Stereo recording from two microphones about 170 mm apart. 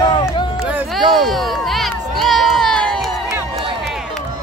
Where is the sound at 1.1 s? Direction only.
Centre (ahead or behind).